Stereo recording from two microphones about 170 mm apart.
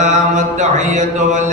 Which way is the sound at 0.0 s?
45° right (ahead or behind).